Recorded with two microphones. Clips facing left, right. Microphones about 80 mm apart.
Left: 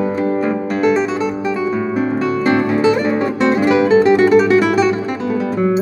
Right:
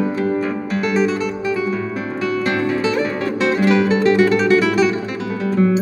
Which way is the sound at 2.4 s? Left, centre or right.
Centre.